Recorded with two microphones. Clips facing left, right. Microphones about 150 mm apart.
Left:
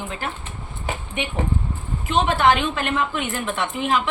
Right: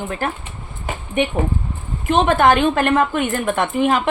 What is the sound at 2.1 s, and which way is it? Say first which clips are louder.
A woman's voice: right 4 dB; 50° right (ahead or behind).